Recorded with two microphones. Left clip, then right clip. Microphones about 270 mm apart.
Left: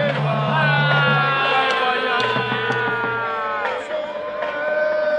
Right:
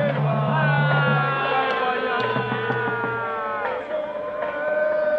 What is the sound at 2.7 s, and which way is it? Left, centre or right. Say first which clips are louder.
Music: left 3 dB; centre.